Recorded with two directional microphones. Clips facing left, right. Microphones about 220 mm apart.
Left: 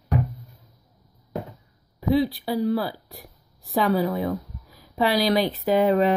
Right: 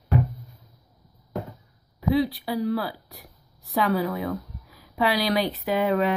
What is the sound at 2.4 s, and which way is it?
A woman's voice, 30° left (ahead or behind).